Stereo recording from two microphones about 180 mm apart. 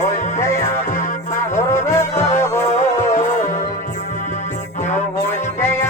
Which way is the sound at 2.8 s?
40° left (ahead or behind).